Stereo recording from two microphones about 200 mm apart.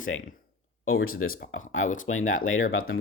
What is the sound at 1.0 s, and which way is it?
Speech, 90° left.